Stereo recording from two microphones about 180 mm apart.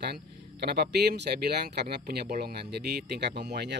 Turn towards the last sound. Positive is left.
turn(degrees=-70)  # may be behind; listen again after turning